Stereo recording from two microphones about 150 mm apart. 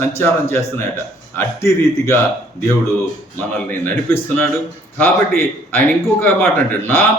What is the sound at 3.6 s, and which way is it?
A man's voice, 10° left (ahead or behind).